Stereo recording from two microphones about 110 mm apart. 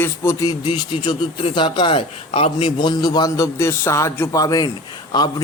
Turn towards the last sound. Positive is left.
turn(degrees=40)  # may be behind; listen again after turning